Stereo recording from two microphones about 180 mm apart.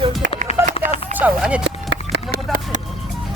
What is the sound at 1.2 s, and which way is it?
Speech, 5° right (ahead or behind).